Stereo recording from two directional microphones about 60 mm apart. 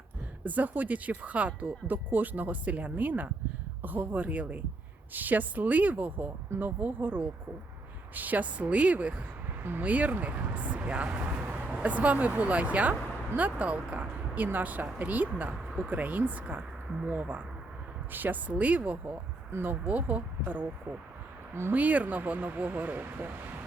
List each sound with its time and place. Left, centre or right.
0.4 s speech: right
21.7 s speech: right